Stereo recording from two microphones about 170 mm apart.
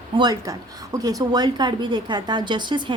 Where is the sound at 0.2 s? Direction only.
20° right (ahead or behind).